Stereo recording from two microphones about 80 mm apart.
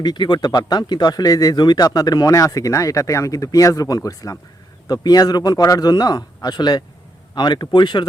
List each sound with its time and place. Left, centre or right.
0.0 s a man's voice: left